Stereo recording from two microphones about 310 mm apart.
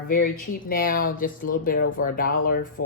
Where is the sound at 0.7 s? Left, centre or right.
Left.